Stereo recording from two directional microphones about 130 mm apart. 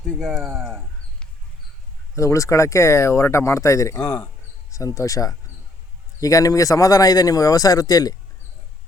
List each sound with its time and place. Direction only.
0.2 s speech: 5° right (ahead or behind)
2.1 s speech: 25° left (ahead or behind)
4.0 s speech: 15° left (ahead or behind)
4.9 s speech: 25° left (ahead or behind)